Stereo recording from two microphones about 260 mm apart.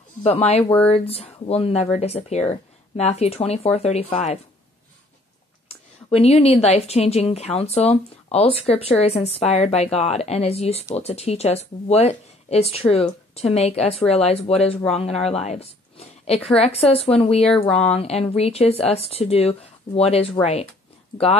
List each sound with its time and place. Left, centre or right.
0.2 s a woman's voice: left
6.0 s a woman's voice: left